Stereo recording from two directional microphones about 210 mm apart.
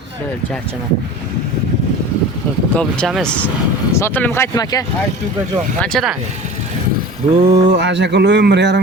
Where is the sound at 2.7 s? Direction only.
Centre (ahead or behind); by 4.9 s 15° left (ahead or behind).